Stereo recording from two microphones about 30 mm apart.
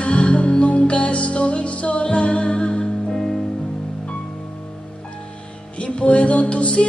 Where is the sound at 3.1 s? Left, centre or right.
Left.